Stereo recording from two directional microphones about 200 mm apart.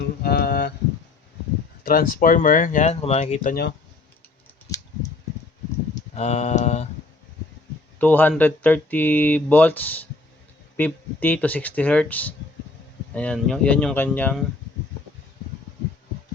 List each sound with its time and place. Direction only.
0.2 s a sound: 50° left (ahead or behind)
1.8 s speech: 45° left (ahead or behind)
3.5 s speech: 55° left (ahead or behind)
6.1 s speech: 35° left (ahead or behind)
7.9 s speech: 10° left (ahead or behind)